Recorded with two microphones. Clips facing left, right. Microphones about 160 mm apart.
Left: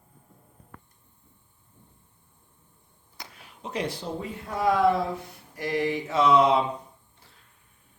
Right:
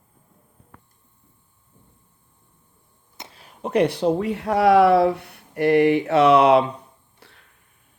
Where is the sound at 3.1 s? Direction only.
25° right (ahead or behind).